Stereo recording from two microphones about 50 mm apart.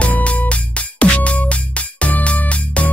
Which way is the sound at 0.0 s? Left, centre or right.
Left.